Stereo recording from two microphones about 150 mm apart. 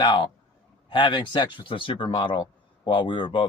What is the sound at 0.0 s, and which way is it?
Speech, 30° left (ahead or behind).